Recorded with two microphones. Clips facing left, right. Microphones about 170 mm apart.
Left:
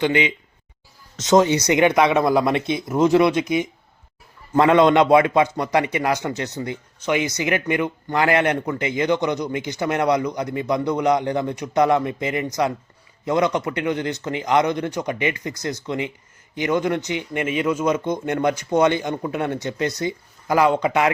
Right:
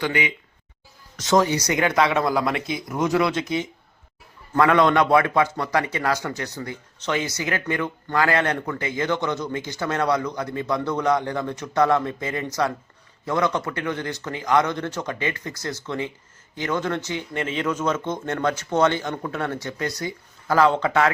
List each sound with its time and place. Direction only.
0.0 s a man's voice: 20° left (ahead or behind)